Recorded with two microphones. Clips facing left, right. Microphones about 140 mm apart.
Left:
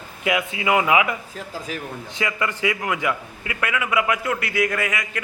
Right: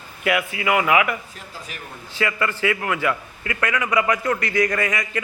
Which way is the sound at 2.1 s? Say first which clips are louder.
Right 2 dB; 15° left (ahead or behind).